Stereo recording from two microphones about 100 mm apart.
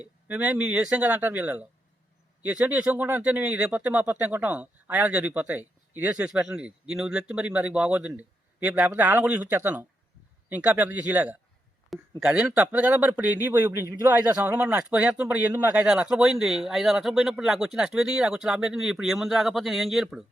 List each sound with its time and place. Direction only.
0.3 s speech: 15° right (ahead or behind)